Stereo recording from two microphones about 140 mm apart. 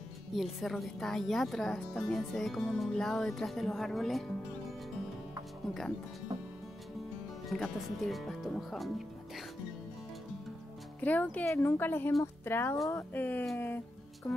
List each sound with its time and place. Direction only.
0.3 s speech: centre (ahead or behind)
7.4 s speech: centre (ahead or behind)
11.0 s speech: 10° left (ahead or behind)
14.2 s music: 30° left (ahead or behind)